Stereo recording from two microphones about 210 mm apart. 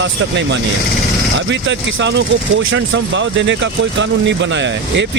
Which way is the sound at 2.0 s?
55° right (ahead or behind).